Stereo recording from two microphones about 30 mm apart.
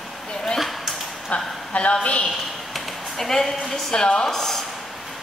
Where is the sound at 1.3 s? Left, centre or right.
Left.